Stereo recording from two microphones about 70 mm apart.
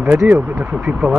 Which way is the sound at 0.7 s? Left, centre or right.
Centre.